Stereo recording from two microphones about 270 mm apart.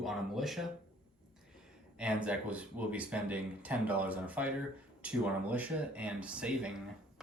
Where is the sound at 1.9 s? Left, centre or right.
Centre.